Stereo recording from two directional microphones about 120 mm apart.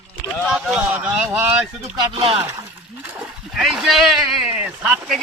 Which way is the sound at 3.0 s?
10° right (ahead or behind).